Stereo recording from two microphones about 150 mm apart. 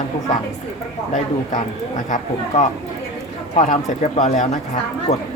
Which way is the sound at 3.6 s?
55° left (ahead or behind).